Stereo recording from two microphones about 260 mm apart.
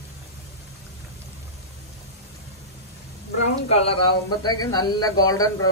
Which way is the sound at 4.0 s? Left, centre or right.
Centre.